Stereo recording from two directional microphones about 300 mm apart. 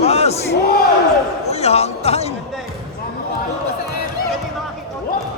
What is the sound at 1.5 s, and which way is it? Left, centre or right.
Speech, left.